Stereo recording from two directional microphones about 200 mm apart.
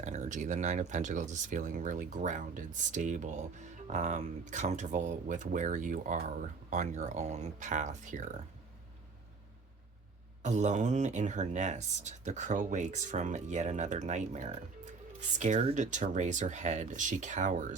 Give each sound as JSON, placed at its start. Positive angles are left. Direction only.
{"t": 0.0, "sound": "speech", "side_deg": -35}
{"t": 10.4, "sound": "speech", "side_deg": -35}